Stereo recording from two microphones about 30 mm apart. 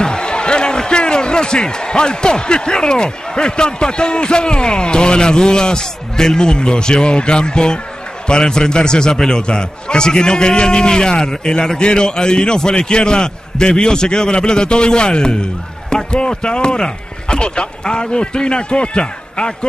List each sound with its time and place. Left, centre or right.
0.0 s a man's voice: left
9.1 s a man's voice: centre
9.4 s a man's voice: left